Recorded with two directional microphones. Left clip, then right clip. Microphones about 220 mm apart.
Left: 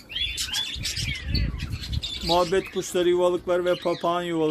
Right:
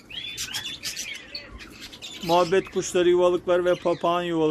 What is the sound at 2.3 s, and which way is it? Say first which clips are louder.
Speech: right 2 dB; 5° right (ahead or behind).